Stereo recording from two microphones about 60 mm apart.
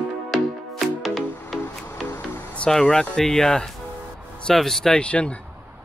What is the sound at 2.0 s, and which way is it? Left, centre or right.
Music, left.